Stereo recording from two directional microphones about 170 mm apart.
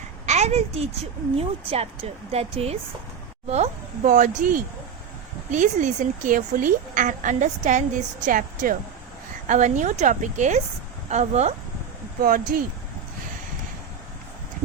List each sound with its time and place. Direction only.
0.3 s a child's voice: 40° right (ahead or behind)
12.2 s speech: 55° right (ahead or behind)